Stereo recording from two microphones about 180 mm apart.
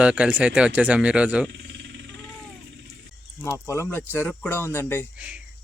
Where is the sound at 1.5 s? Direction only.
75° right (ahead or behind).